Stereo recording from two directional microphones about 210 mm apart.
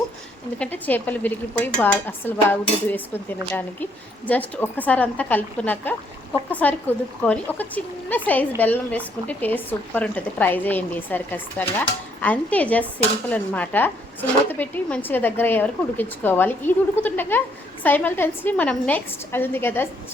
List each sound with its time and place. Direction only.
0.6 s a woman's voice: 10° left (ahead or behind)